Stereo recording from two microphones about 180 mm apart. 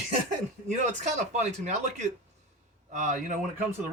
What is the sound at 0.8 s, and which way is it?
Speech, 40° right (ahead or behind).